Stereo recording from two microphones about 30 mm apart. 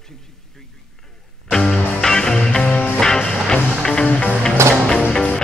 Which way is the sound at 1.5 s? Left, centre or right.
Centre.